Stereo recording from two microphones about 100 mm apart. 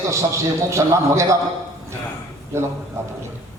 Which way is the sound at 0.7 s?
30° right (ahead or behind).